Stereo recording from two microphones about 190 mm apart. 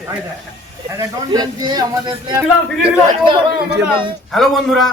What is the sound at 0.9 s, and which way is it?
Speech, 20° right (ahead or behind).